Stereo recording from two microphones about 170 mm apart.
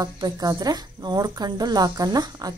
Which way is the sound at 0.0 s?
20° right (ahead or behind).